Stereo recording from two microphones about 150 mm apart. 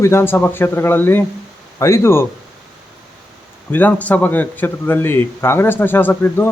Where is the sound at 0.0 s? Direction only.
15° left (ahead or behind).